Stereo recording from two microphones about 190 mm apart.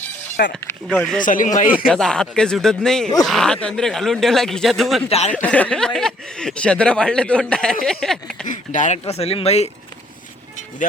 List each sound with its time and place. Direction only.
0.7 s speech: 5° left (ahead or behind)
1.2 s speech: 45° left (ahead or behind)
1.9 s speech: 5° left (ahead or behind)
5.0 s speech: 35° left (ahead or behind)
5.3 s speech: 5° left (ahead or behind)
8.4 s speech: 40° left (ahead or behind)